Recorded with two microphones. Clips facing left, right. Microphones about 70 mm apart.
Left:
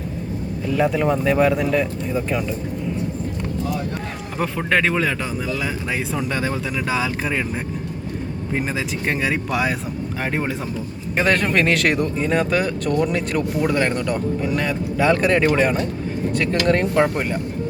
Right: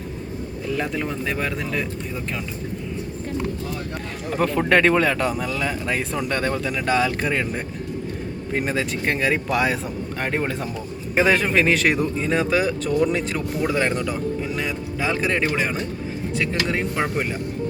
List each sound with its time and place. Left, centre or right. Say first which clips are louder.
0.7 s speech: left 7 dB; centre
4.4 s speech: right 2 dB; centre
8.5 s speech: right 1 dB; centre
11.2 s speech: even; centre